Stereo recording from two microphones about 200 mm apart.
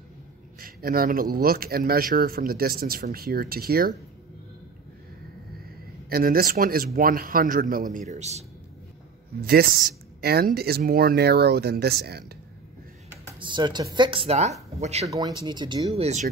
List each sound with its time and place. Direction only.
0.6 s speech: 45° right (ahead or behind)
6.0 s speech: 50° right (ahead or behind)
9.4 s speech: 50° right (ahead or behind)
13.4 s speech: 20° right (ahead or behind)
15.0 s speech: 15° right (ahead or behind); by 16.3 s 30° right (ahead or behind)